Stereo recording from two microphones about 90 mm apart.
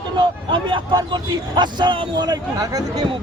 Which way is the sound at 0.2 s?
60° right (ahead or behind).